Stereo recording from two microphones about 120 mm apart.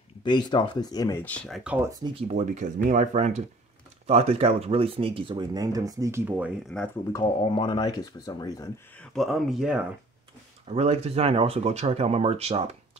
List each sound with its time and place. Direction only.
0.2 s speech: 40° left (ahead or behind)
1.2 s speech: 10° left (ahead or behind)
1.5 s speech: 10° right (ahead or behind)
2.1 s speech: 65° right (ahead or behind)
4.1 s speech: 60° right (ahead or behind); by 6.2 s 25° right (ahead or behind)
6.2 s speech: 15° right (ahead or behind)
6.7 s speech: 5° left (ahead or behind)
7.4 s speech: 45° left (ahead or behind)
9.1 s speech: centre (ahead or behind)
10.7 s speech: 60° right (ahead or behind)